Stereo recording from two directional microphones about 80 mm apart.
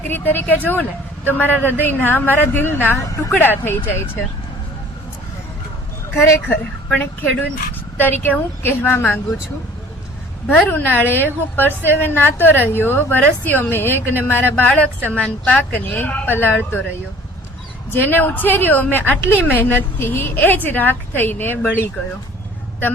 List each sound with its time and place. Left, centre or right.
0.1 s a woman's voice: left
3.0 s speech: left
3.3 s a woman's voice: left
6.1 s a woman's voice: left
10.5 s a woman's voice: left
17.9 s a woman's voice: left